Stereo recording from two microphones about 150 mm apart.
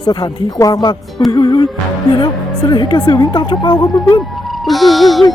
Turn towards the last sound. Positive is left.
turn(degrees=0)  # may be behind; listen again after turning